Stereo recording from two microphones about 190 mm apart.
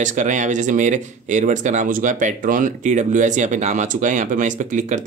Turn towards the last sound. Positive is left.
turn(degrees=-40)  # may be behind; listen again after turning